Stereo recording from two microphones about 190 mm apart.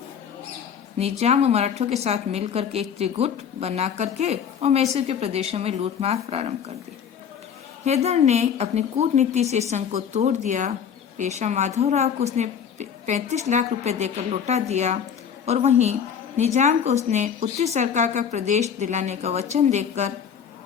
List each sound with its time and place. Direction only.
1.2 s a woman's voice: 35° right (ahead or behind)
7.9 s a woman's voice: 35° right (ahead or behind)